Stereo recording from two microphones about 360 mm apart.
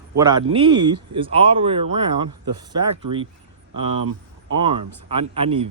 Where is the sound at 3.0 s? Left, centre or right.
Centre.